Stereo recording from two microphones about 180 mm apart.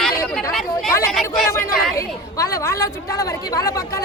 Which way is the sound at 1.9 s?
15° left (ahead or behind).